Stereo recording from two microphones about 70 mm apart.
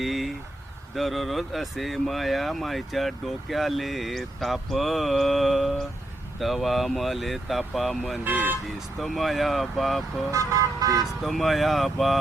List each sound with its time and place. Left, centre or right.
0.0 s vehicle: centre
0.9 s speech: centre
8.2 s speech: right
9.0 s speech: centre
10.3 s speech: right
11.2 s speech: centre